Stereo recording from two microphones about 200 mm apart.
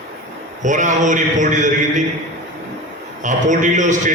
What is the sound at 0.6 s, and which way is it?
A man's voice, 40° right (ahead or behind).